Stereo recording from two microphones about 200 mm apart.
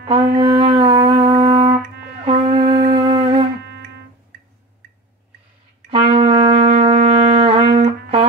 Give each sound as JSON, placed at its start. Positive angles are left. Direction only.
{"t": 0.1, "sound": "shofar", "side_deg": -25}
{"t": 2.2, "sound": "music", "side_deg": -25}
{"t": 5.9, "sound": "music", "side_deg": -30}